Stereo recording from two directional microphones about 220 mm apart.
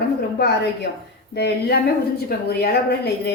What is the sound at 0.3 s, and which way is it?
Speech, 50° left (ahead or behind).